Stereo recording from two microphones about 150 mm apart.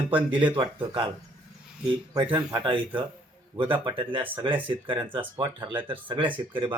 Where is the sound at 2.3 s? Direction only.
30° right (ahead or behind).